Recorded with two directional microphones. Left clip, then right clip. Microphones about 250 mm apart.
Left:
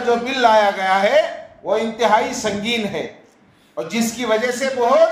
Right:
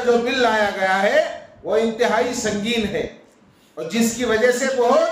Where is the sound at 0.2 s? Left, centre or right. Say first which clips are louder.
Left 4 dB; centre.